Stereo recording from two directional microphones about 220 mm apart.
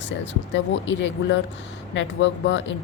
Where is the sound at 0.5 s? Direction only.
55° left (ahead or behind).